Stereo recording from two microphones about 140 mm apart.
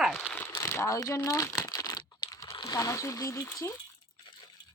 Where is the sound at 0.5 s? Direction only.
20° left (ahead or behind).